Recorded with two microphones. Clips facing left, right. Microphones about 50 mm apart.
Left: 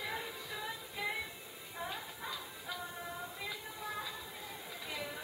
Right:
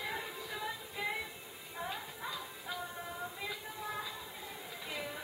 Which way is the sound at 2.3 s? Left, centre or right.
Centre.